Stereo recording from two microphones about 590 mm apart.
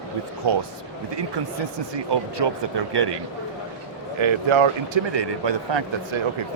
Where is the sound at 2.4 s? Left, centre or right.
Right.